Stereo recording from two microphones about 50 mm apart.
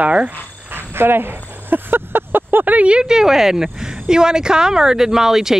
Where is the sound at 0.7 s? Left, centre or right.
Right.